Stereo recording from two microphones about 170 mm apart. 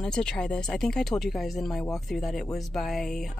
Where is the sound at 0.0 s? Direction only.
5° left (ahead or behind).